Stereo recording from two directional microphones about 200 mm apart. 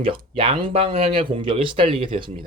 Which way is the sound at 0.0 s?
25° right (ahead or behind).